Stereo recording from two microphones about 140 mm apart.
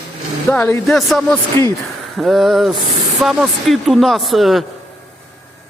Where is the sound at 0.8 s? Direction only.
Centre (ahead or behind).